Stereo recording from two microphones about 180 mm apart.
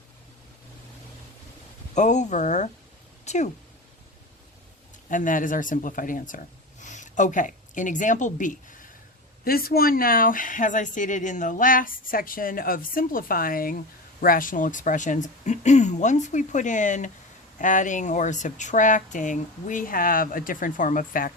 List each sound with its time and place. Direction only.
2.0 s speech: 40° left (ahead or behind)
5.0 s speech: 45° left (ahead or behind)